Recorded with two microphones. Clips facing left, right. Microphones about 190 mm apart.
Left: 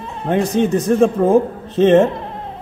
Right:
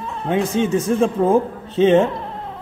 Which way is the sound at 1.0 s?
60° left (ahead or behind).